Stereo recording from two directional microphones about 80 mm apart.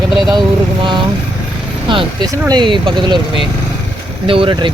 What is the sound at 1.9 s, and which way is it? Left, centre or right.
Speech, right.